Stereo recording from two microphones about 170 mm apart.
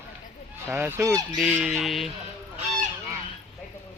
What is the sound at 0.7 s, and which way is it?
Speech, 15° right (ahead or behind).